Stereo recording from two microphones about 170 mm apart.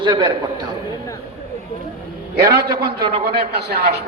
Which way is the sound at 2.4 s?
25° right (ahead or behind).